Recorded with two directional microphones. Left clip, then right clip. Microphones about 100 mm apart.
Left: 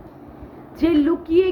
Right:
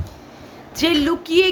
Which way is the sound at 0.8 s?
20° right (ahead or behind).